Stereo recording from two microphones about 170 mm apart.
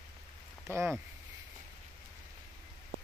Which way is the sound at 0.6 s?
15° right (ahead or behind).